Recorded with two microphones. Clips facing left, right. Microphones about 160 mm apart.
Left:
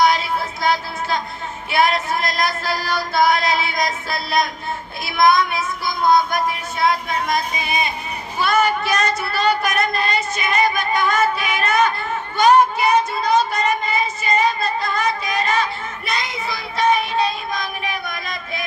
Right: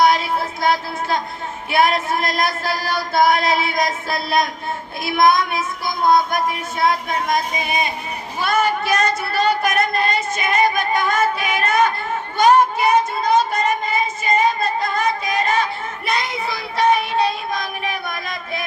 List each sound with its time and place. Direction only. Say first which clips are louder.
0.6 s speech: right 1 dB; 50° right (ahead or behind)
16.0 s child singing: right 3 dB; 60° right (ahead or behind)